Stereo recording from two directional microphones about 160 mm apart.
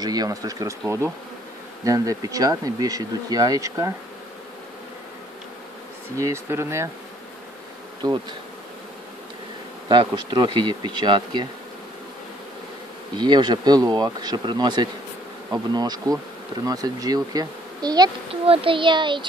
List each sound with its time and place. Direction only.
0.0 s speech: 25° right (ahead or behind)
6.1 s speech: 20° right (ahead or behind)
8.0 s speech: 30° right (ahead or behind)
9.8 s speech: 25° right (ahead or behind)
13.1 s speech: 30° right (ahead or behind)